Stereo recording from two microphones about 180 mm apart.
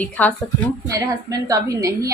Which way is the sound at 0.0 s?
10° left (ahead or behind).